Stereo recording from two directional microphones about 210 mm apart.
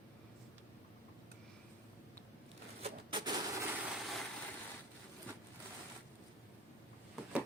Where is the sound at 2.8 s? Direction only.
20° right (ahead or behind).